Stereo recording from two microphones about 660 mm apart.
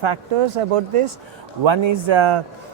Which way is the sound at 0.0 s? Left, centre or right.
Right.